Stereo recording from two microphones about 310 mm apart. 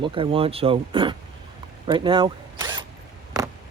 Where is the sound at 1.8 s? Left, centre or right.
Centre.